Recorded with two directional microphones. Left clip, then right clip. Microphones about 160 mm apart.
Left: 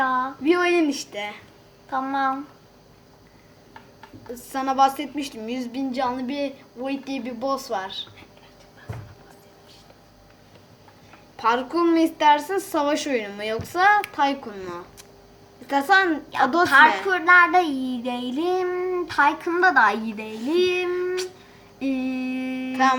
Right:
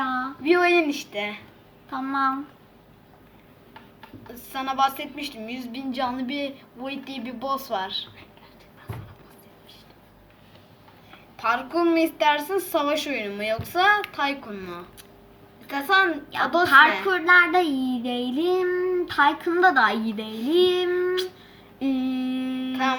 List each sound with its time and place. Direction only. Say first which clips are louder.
0.0 s a sound: left 5 dB; centre (ahead or behind)
0.4 s speech: right 2 dB; 55° left (ahead or behind)
1.9 s child singing: left 1 dB; centre (ahead or behind)
4.5 s a sound: left 4 dB; 55° left (ahead or behind)
11.3 s a woman's voice: left 2 dB; 60° left (ahead or behind)
15.6 s a woman's voice: left 2 dB; 65° left (ahead or behind)
17.1 s child singing: left 2 dB; centre (ahead or behind)
21.8 s mantra: even; 10° right (ahead or behind)